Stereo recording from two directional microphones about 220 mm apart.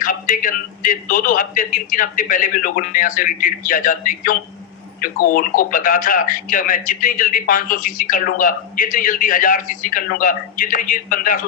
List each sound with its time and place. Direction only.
0.0 s speech: 40° left (ahead or behind)